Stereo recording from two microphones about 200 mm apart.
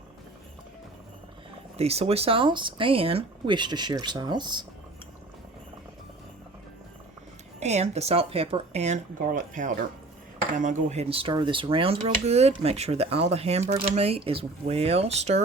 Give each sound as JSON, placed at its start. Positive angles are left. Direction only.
{"t": 1.8, "sound": "speech", "side_deg": -30}
{"t": 7.6, "sound": "speech", "side_deg": -35}